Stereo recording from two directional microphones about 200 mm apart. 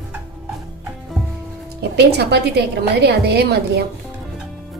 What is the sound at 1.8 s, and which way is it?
A woman's voice, 55° right (ahead or behind).